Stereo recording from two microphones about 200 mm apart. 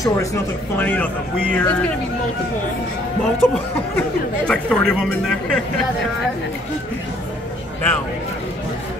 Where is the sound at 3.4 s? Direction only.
10° left (ahead or behind).